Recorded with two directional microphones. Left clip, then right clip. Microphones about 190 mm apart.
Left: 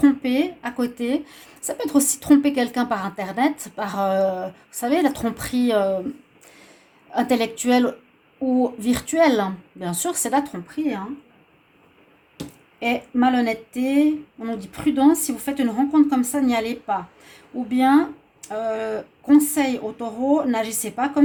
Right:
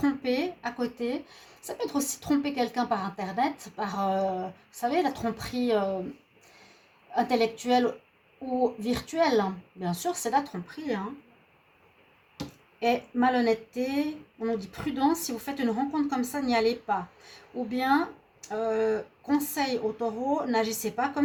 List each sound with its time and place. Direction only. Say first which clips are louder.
0.0 s a woman's voice: left 8 dB; 40° left (ahead or behind)
7.1 s a woman's voice: left 4 dB; 45° left (ahead or behind)
12.8 s speech: left 4 dB; 40° left (ahead or behind)